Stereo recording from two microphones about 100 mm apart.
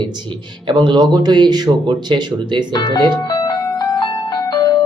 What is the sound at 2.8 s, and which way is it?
Music, 45° left (ahead or behind).